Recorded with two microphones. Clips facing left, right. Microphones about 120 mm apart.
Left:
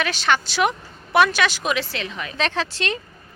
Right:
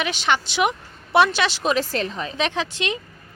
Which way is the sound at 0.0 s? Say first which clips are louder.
Left 1 dB; 20° right (ahead or behind).